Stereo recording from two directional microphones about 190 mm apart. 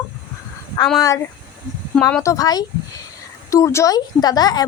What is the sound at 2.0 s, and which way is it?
Speech, 5° left (ahead or behind).